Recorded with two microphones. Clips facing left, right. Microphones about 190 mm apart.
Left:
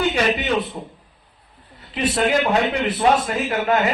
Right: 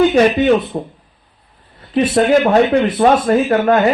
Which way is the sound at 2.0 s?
45° right (ahead or behind).